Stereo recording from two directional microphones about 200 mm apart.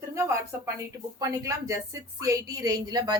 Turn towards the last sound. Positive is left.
turn(degrees=-20)  # may be behind; listen again after turning